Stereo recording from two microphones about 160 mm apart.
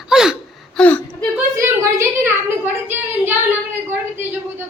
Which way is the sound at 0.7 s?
10° left (ahead or behind).